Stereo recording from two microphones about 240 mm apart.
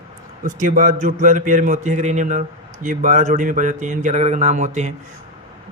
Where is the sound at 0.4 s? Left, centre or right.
Right.